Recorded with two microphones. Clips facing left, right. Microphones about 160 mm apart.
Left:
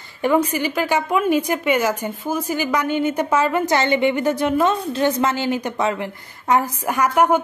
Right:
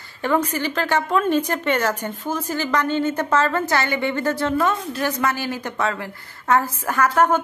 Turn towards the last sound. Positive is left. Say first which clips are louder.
# left 1 dB
turn(degrees=15)  # may be behind; listen again after turning